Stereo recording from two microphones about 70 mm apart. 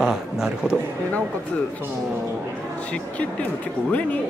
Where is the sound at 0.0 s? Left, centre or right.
Centre.